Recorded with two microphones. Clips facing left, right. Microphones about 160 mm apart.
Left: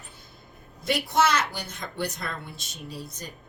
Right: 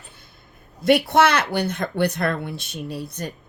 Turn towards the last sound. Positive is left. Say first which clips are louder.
# right 8 dB
turn(degrees=-65)  # may be behind; listen again after turning